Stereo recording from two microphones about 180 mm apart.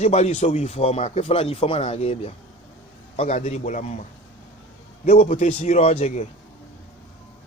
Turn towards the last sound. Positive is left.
turn(degrees=35)  # may be behind; listen again after turning